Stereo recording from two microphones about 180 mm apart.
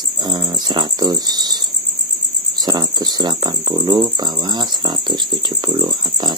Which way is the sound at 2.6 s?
20° right (ahead or behind).